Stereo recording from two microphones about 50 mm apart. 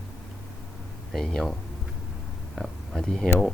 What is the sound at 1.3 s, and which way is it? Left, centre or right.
Speech, centre.